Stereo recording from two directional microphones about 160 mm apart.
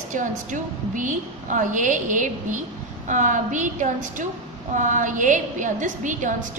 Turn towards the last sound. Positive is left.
turn(degrees=-55)  # may be behind; listen again after turning